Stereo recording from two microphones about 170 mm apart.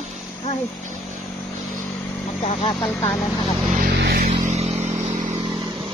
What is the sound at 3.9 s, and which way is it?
Vehicle, 70° right (ahead or behind).